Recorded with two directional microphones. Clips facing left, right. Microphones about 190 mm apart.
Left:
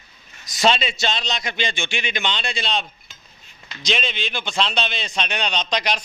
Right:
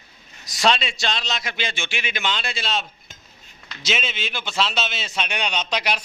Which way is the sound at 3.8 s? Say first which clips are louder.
Left 2 dB; 5° right (ahead or behind).